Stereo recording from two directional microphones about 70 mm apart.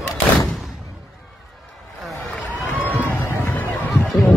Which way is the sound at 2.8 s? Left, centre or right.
Left.